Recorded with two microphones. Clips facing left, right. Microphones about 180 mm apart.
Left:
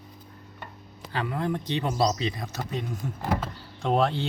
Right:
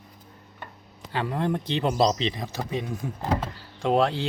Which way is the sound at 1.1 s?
25° right (ahead or behind).